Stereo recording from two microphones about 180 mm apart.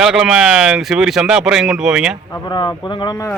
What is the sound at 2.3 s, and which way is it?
Speech, 25° left (ahead or behind).